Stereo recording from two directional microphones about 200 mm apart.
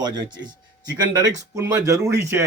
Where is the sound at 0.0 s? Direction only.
20° right (ahead or behind).